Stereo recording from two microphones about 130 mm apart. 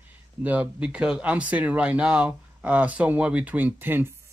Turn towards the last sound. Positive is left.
turn(degrees=-15)  # may be behind; listen again after turning